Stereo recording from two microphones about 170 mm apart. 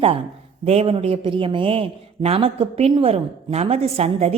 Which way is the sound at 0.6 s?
35° right (ahead or behind).